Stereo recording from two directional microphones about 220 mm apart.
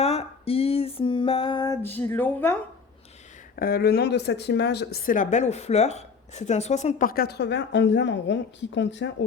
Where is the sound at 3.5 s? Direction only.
45° left (ahead or behind).